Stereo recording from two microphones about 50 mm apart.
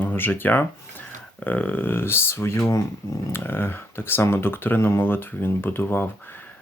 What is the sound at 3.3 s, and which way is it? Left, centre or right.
Speech, left.